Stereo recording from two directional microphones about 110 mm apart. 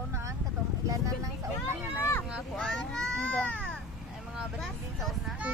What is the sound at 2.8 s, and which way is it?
Baby cry, 5° left (ahead or behind).